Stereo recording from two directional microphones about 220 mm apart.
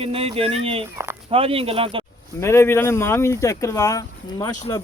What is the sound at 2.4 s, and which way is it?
Speech, 10° left (ahead or behind).